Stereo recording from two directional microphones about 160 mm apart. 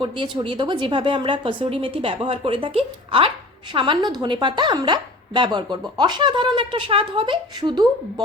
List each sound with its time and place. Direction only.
0.0 s a woman's voice: 30° right (ahead or behind)